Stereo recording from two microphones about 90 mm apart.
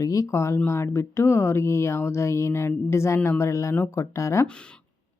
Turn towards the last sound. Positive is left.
turn(degrees=35)  # may be behind; listen again after turning